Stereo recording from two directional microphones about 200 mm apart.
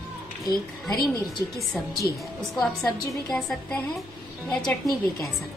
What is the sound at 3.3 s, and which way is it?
Speech, centre (ahead or behind).